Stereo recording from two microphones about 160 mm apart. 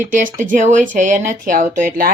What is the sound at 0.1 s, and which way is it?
Speech, 55° right (ahead or behind).